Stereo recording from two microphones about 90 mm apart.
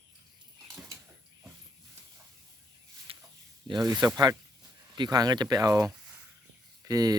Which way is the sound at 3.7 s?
50° right (ahead or behind).